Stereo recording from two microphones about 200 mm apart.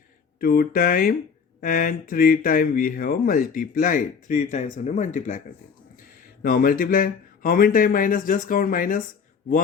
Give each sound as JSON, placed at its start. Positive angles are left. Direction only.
{"t": 0.3, "sound": "speech", "side_deg": 45}
{"t": 6.4, "sound": "speech", "side_deg": 45}